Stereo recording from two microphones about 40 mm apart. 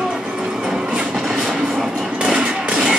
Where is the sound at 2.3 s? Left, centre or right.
Right.